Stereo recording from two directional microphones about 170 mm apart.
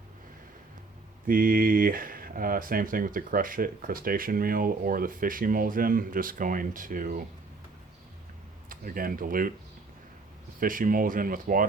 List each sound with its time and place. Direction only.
1.3 s speech: 55° right (ahead or behind)
8.7 s speech: 55° right (ahead or behind)
10.6 s speech: 55° right (ahead or behind)